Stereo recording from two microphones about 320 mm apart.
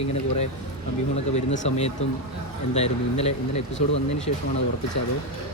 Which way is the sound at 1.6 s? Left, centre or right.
Centre.